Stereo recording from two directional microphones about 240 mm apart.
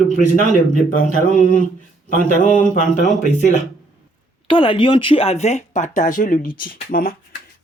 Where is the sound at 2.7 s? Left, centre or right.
Left.